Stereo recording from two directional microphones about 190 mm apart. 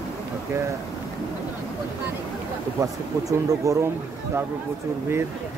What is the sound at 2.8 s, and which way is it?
Speech, 15° right (ahead or behind).